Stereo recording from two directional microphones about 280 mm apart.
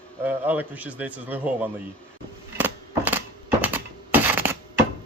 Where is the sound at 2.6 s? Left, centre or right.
Centre.